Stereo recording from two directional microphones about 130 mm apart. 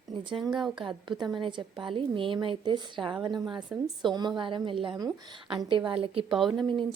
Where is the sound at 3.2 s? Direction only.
5° right (ahead or behind).